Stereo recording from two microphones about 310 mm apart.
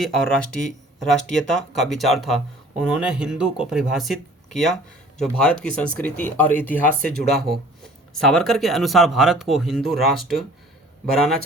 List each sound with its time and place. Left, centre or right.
0.0 s speech: centre
7.0 s speech: right
8.1 s speech: centre